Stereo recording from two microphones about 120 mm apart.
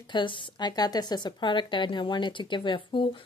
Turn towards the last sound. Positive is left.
turn(degrees=45)  # may be behind; listen again after turning